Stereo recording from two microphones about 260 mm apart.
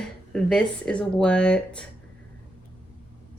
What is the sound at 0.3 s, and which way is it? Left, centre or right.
A woman's voice, centre.